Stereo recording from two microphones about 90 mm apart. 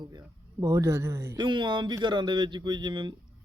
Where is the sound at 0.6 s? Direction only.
35° right (ahead or behind).